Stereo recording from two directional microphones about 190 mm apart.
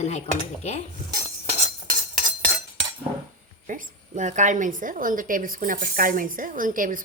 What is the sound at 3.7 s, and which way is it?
A woman's voice, 40° right (ahead or behind).